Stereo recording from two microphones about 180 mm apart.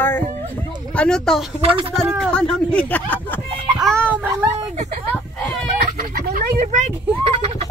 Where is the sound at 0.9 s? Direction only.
5° left (ahead or behind).